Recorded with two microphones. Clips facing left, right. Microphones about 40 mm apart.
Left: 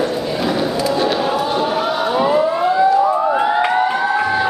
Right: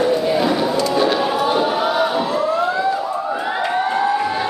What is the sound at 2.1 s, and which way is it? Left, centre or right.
Siren, left.